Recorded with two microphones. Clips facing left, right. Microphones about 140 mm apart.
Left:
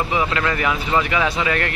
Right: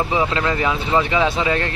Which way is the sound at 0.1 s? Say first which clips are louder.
Right 1 dB; 25° right (ahead or behind).